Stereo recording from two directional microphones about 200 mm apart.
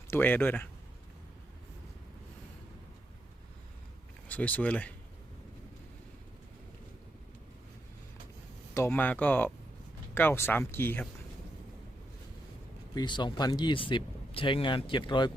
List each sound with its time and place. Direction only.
0.1 s speech: 10° left (ahead or behind)
4.3 s speech: 10° left (ahead or behind)
8.7 s speech: 10° left (ahead or behind)
12.9 s speech: 20° left (ahead or behind)